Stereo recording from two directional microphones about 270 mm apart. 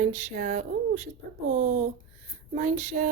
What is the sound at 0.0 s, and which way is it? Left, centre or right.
A woman's voice, right.